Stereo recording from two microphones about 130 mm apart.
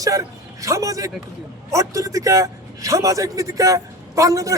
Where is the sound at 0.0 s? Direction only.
25° right (ahead or behind).